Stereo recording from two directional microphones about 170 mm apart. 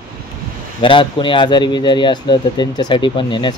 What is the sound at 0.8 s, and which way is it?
Speech, 30° left (ahead or behind).